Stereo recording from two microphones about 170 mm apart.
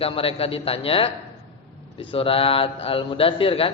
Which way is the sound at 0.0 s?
35° left (ahead or behind).